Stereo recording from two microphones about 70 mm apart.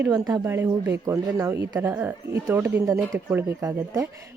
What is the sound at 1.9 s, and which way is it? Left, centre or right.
Speech, right.